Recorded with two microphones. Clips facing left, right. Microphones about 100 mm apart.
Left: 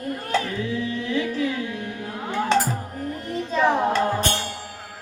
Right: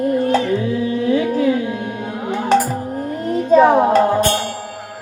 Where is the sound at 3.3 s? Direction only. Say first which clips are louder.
Right 10 dB; 45° right (ahead or behind).